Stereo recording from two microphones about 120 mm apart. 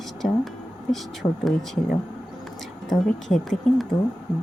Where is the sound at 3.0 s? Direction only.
Centre (ahead or behind).